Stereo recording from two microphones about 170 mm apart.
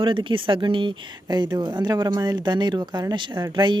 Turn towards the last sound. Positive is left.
turn(degrees=-25)  # may be behind; listen again after turning